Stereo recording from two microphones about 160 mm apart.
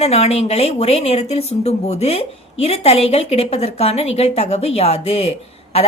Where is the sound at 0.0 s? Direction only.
40° left (ahead or behind).